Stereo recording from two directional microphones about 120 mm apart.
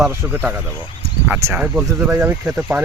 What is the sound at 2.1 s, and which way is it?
Speech, 15° right (ahead or behind).